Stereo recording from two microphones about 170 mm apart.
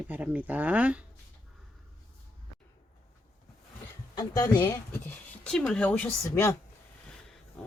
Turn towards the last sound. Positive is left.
turn(degrees=10)  # may be behind; listen again after turning